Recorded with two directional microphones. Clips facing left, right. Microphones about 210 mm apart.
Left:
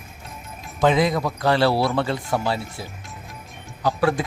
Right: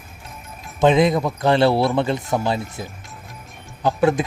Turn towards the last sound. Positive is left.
turn(degrees=-20)  # may be behind; listen again after turning